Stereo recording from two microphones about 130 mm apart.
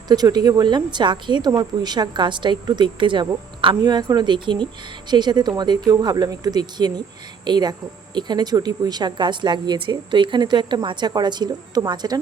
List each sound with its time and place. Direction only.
0.1 s a woman's voice: 30° right (ahead or behind)